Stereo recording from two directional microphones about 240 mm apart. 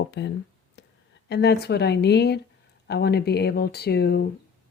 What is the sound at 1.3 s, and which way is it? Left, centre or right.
Speech, left.